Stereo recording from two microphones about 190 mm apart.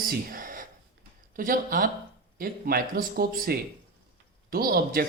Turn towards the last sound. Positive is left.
turn(degrees=-50)  # may be behind; listen again after turning